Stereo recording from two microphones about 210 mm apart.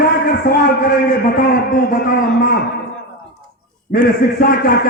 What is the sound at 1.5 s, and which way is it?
A man's voice, 40° left (ahead or behind).